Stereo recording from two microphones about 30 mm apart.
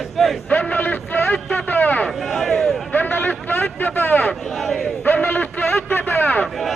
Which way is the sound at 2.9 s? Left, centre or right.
Left.